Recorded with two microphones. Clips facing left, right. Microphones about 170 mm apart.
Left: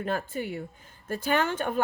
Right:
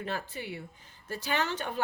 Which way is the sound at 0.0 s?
45° left (ahead or behind).